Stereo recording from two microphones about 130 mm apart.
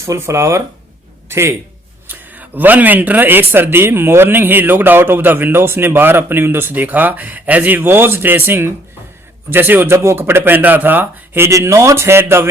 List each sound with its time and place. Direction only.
0.0 s a man's voice: 20° right (ahead or behind)